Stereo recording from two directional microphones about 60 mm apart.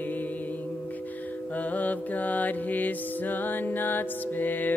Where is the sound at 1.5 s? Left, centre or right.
Left.